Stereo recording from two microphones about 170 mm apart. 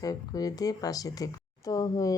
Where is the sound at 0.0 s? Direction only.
20° left (ahead or behind).